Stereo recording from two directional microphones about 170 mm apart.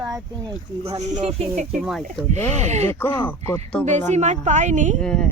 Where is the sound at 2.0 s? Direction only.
40° right (ahead or behind).